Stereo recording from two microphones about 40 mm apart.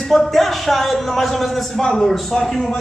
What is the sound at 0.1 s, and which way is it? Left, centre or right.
A man's voice, centre.